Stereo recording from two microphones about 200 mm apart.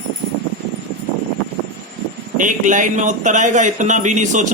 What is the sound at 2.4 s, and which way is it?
Speech, 40° right (ahead or behind).